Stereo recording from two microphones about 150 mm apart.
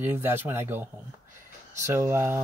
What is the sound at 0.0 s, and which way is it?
Speech, 15° right (ahead or behind).